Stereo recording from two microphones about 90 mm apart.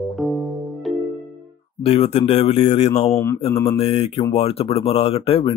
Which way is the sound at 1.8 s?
90° left.